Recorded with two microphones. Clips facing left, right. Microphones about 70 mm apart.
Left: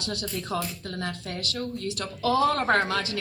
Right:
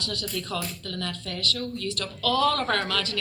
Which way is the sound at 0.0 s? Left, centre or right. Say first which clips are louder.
Even; left.